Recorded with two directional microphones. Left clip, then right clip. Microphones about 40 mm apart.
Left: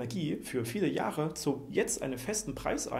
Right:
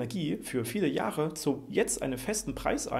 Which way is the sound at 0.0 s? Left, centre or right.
Right.